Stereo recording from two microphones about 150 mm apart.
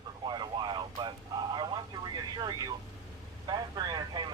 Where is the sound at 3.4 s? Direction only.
30° right (ahead or behind).